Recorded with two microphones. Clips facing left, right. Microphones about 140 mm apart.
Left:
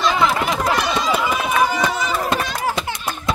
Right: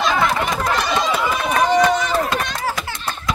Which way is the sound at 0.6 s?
10° left (ahead or behind).